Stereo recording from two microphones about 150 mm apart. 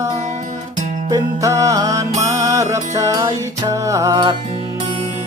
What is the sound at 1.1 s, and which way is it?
Music, 20° right (ahead or behind).